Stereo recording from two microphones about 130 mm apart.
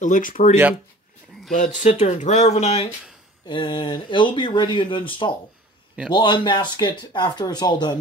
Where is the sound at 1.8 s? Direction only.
50° left (ahead or behind).